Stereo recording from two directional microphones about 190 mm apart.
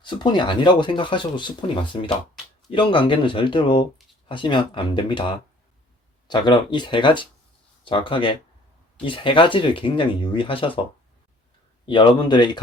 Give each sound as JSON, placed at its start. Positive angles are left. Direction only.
{"t": 0.0, "sound": "speech", "side_deg": 25}
{"t": 6.2, "sound": "speech", "side_deg": 25}
{"t": 11.9, "sound": "speech", "side_deg": 25}